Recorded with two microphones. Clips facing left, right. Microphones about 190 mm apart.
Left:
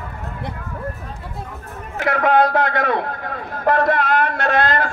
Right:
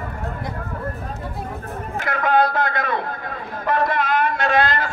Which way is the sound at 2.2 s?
65° left (ahead or behind).